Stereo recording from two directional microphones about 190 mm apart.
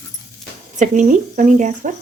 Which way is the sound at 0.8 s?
40° right (ahead or behind).